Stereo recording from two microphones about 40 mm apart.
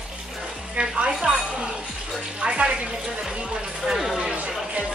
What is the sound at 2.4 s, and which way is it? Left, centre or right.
Music, right.